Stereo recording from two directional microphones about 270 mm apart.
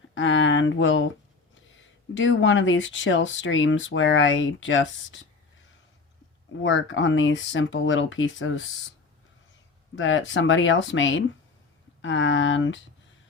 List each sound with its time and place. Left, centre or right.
0.1 s speech: left
2.1 s speech: left
6.6 s speech: left
9.9 s speech: left